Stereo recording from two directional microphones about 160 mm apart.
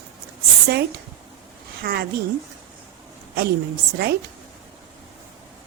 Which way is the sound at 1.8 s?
70° right (ahead or behind).